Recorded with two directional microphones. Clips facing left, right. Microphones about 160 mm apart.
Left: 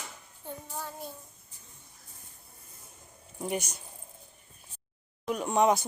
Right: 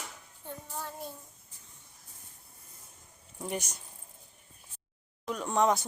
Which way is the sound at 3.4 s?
10° left (ahead or behind).